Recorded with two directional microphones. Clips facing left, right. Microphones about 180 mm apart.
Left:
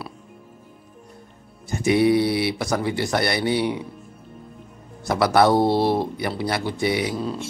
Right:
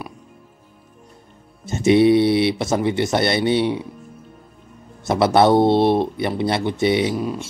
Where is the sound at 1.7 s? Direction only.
25° right (ahead or behind).